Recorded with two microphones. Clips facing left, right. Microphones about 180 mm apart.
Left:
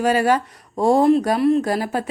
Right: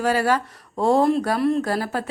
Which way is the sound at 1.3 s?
Centre (ahead or behind).